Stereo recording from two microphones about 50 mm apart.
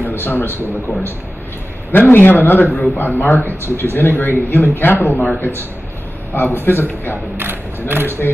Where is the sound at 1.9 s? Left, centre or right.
Left.